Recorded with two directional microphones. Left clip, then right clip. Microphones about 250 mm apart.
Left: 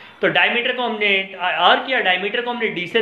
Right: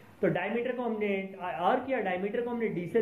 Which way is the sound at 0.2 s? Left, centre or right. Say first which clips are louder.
Left 13 dB; centre.